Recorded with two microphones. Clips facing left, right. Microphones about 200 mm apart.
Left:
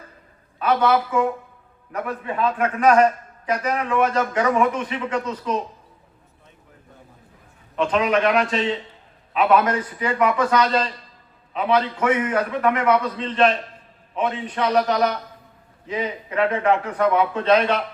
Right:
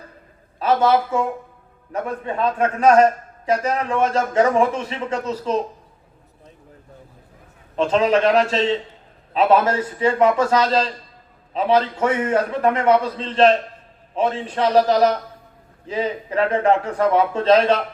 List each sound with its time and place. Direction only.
0.6 s a man's voice: 30° right (ahead or behind)
7.8 s a man's voice: 30° right (ahead or behind)